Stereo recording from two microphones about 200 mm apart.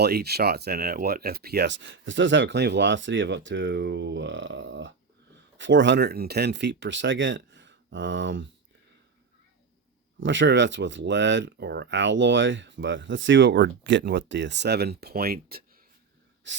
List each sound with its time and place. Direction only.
0.0 s speech: 55° right (ahead or behind)
10.2 s speech: 65° right (ahead or behind); by 15.8 s 50° right (ahead or behind)
16.4 s a sound: 65° right (ahead or behind)